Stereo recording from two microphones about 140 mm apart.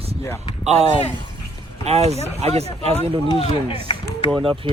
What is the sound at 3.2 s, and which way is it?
Speech, 40° left (ahead or behind).